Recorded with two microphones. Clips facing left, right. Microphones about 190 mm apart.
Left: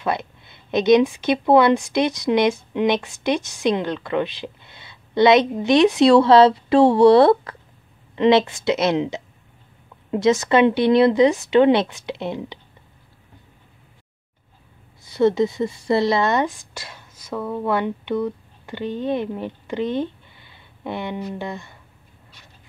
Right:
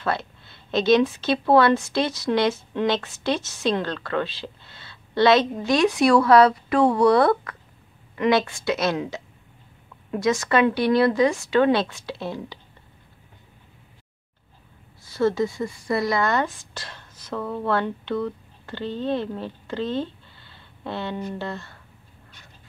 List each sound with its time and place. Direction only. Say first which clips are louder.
0.0 s a woman's voice: left 2 dB; 15° left (ahead or behind)
15.0 s a woman's voice: left 4 dB; 20° left (ahead or behind)